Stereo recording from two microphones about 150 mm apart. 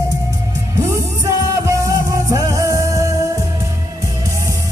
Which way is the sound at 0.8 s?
20° right (ahead or behind).